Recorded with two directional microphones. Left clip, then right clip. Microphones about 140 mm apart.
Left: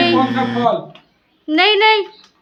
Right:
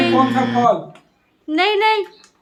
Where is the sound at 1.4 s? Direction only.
40° left (ahead or behind).